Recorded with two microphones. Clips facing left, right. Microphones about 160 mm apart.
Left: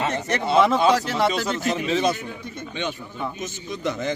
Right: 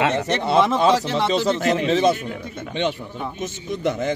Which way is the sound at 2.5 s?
65° right (ahead or behind).